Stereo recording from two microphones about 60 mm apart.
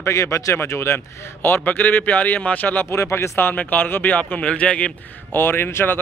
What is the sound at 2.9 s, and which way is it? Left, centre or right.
Speech, left.